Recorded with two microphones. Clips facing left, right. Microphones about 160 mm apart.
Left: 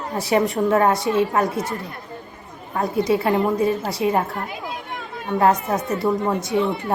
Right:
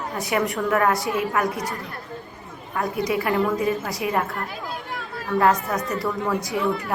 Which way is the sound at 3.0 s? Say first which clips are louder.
Left 2 dB; 30° left (ahead or behind).